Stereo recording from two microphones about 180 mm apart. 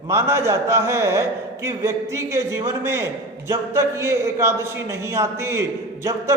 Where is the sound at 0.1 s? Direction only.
15° right (ahead or behind).